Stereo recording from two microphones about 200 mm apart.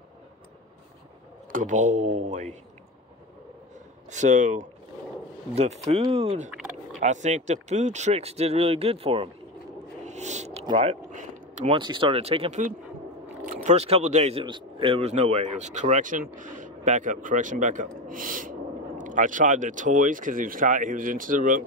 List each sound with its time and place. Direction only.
1.5 s speech: 40° right (ahead or behind)
4.1 s speech: 35° right (ahead or behind)
7.0 s speech: 35° right (ahead or behind)
10.0 s a sound: 35° right (ahead or behind)
10.8 s speech: 35° right (ahead or behind)